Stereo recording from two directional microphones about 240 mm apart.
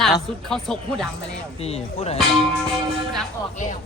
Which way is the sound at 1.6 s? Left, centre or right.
Left.